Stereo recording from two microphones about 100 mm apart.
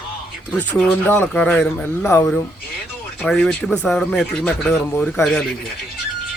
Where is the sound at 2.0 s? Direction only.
25° left (ahead or behind).